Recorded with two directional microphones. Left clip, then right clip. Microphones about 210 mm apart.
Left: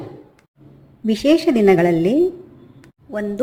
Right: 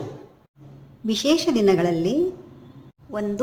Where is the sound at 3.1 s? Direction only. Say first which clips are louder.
Left 3 dB; centre (ahead or behind).